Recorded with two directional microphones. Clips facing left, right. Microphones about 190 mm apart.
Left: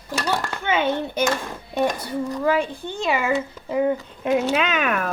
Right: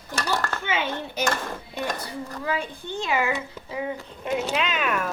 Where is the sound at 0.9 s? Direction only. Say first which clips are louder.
Left 5 dB; 15° left (ahead or behind).